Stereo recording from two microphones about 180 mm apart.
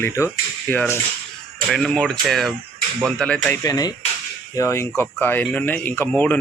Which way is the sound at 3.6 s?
20° left (ahead or behind).